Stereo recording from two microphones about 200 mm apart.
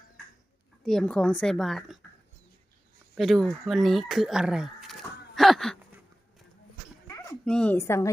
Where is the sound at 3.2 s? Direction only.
Centre (ahead or behind).